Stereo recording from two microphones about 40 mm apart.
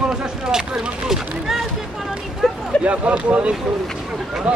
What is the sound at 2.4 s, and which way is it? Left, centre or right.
Speech, centre.